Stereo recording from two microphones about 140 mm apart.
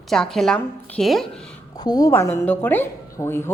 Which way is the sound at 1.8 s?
25° left (ahead or behind).